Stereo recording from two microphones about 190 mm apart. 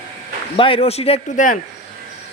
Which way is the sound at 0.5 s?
30° left (ahead or behind).